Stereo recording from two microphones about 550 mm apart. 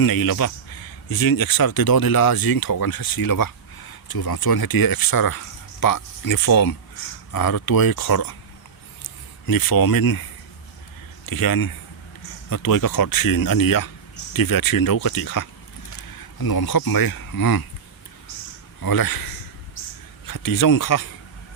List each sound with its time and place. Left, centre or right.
0.0 s speech: left
9.5 s speech: left
11.3 s speech: left
18.8 s speech: left